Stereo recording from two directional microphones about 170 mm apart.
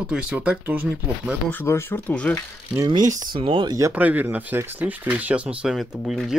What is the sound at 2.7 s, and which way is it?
Speech, 25° right (ahead or behind).